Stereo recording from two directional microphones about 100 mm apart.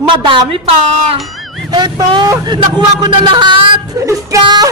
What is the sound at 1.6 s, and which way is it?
Speech, 45° right (ahead or behind).